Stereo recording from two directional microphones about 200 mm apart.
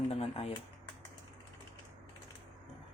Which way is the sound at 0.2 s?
30° left (ahead or behind).